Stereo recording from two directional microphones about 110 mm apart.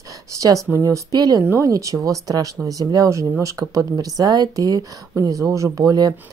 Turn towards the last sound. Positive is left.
turn(degrees=-35)  # may be behind; listen again after turning